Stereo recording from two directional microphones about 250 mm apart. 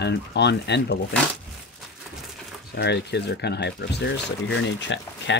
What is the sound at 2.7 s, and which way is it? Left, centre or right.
Speech, left.